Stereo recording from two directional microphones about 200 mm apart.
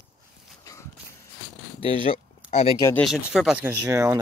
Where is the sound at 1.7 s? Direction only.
30° left (ahead or behind).